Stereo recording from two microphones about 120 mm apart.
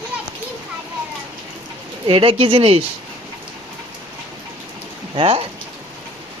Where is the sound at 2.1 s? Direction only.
50° right (ahead or behind).